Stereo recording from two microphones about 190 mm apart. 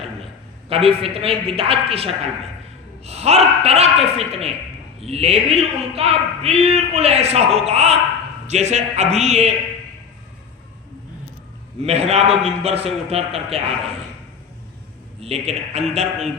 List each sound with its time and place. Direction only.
0.7 s a man's voice: 30° right (ahead or behind)
3.1 s a man's voice: 35° right (ahead or behind)
11.8 s a man's voice: 35° right (ahead or behind)
15.2 s a man's voice: 35° right (ahead or behind)